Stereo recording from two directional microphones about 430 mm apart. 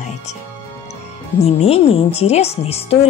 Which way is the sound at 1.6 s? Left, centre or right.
Centre.